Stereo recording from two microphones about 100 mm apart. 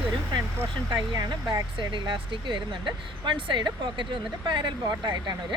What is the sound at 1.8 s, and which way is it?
A woman's voice, 55° right (ahead or behind).